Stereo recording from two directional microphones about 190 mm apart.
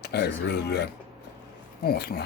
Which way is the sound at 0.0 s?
60° left (ahead or behind).